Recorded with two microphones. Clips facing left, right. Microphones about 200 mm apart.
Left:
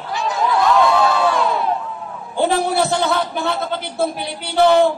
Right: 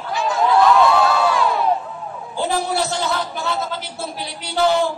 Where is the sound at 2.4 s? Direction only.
60° left (ahead or behind).